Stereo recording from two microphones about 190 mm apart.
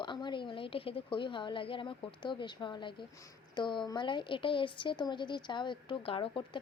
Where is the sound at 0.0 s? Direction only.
25° left (ahead or behind).